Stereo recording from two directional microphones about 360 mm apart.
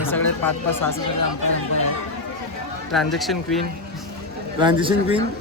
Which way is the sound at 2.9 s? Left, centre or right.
Centre.